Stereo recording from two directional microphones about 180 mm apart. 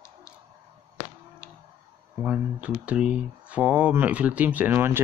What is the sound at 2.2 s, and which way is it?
Speech, 5° right (ahead or behind).